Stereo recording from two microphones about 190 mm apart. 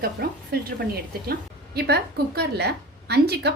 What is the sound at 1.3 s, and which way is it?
A woman's voice, 55° right (ahead or behind).